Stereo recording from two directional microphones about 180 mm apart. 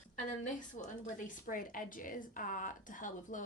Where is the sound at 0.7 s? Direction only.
45° left (ahead or behind).